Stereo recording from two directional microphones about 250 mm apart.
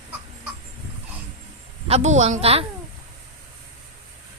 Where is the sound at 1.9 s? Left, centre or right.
Right.